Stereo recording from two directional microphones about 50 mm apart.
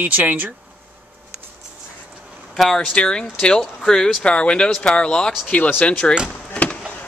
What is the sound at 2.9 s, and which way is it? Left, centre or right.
Speech, centre.